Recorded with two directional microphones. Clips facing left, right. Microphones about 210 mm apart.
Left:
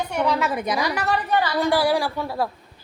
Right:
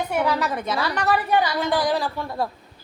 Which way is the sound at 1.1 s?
15° right (ahead or behind).